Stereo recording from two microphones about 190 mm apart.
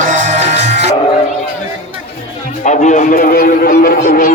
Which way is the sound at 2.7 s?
40° left (ahead or behind).